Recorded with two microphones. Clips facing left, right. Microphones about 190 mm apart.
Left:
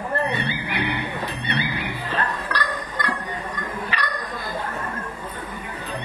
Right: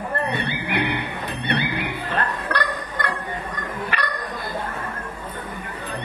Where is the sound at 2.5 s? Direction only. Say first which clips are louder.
Right 5 dB; 55° right (ahead or behind).